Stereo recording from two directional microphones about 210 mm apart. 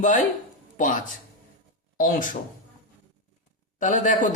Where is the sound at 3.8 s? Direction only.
35° left (ahead or behind).